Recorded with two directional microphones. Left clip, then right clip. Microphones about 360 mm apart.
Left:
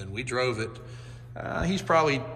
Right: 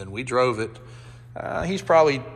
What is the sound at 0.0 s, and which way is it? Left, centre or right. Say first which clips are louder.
A man's voice: right 6 dB; centre.